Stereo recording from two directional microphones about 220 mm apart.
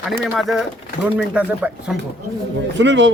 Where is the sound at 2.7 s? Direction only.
55° right (ahead or behind).